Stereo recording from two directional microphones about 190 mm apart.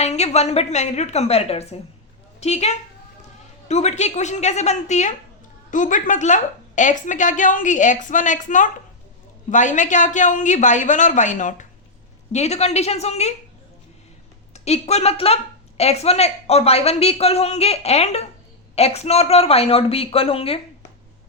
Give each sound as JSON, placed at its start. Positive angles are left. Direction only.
{"t": 0.0, "sound": "a woman's voice", "side_deg": 35}
{"t": 14.5, "sound": "a woman's voice", "side_deg": 35}